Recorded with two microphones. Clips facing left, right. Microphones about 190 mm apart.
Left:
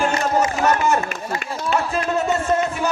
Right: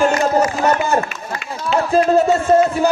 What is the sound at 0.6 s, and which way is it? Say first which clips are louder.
Music: right 1 dB; 30° right (ahead or behind).